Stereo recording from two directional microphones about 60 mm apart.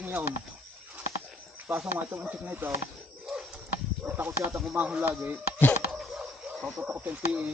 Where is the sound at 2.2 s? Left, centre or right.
Right.